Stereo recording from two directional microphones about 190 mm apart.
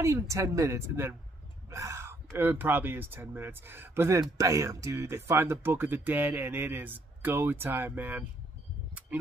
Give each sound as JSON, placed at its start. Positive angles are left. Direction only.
{"t": 0.0, "sound": "speech", "side_deg": -15}
{"t": 1.7, "sound": "a sound", "side_deg": -15}
{"t": 2.3, "sound": "speech", "side_deg": -10}